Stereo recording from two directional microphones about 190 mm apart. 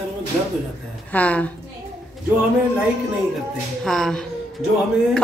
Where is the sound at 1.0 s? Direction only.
5° left (ahead or behind).